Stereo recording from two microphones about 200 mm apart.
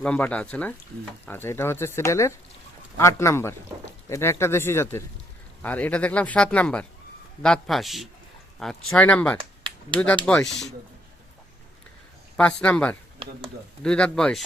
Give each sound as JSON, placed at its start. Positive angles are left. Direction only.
{"t": 0.0, "sound": "speech", "side_deg": 5}
{"t": 12.4, "sound": "speech", "side_deg": 5}
{"t": 13.2, "sound": "speech", "side_deg": -30}
{"t": 13.8, "sound": "speech", "side_deg": 5}